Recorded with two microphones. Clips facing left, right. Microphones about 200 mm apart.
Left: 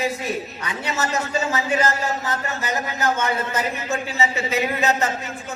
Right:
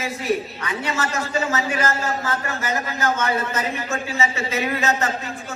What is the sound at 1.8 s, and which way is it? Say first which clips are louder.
Speech: even; 20° left (ahead or behind).